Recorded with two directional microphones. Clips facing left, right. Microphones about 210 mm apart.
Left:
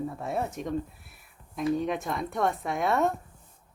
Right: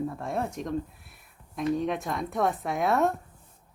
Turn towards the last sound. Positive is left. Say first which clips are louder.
# right 1 dB
turn(degrees=0)  # may be behind; listen again after turning